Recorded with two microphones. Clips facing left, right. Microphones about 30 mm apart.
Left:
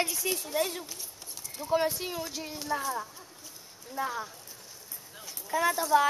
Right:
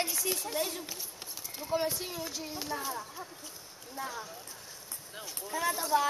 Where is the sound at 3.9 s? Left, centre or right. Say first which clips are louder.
Left 6 dB; centre.